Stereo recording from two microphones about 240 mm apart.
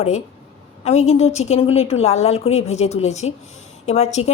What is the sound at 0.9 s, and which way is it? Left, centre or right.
Speech, left.